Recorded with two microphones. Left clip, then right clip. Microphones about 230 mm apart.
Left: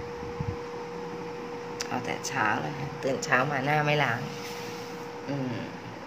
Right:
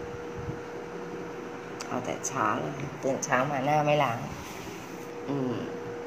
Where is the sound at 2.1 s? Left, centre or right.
Centre.